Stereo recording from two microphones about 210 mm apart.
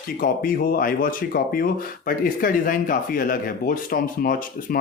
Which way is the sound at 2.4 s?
40° left (ahead or behind).